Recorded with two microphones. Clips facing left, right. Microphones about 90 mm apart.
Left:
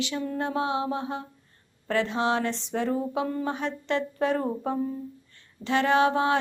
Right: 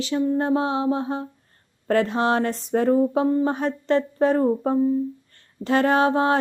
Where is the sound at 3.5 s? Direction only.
40° right (ahead or behind).